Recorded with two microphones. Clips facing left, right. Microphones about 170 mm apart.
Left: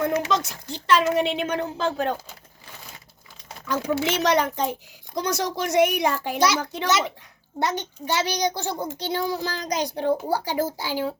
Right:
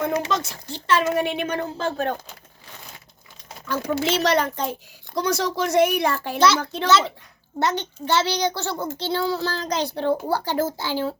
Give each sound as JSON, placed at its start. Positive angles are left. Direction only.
{"t": 0.3, "sound": "a child's voice", "side_deg": 15}
{"t": 3.7, "sound": "a child's voice", "side_deg": 15}